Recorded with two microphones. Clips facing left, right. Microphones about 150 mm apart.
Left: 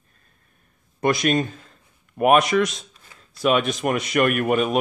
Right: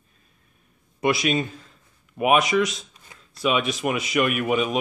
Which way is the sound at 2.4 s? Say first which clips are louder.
Left 2 dB; centre (ahead or behind).